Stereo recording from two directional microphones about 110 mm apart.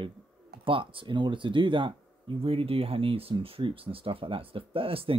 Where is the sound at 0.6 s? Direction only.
50° right (ahead or behind).